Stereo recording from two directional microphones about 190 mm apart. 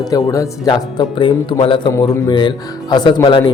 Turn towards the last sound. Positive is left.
turn(degrees=25)  # may be behind; listen again after turning